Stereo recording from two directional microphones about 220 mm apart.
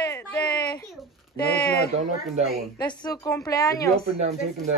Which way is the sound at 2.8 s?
20° left (ahead or behind).